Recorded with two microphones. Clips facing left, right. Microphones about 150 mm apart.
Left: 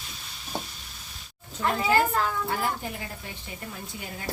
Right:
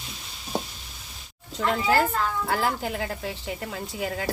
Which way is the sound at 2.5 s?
90° right.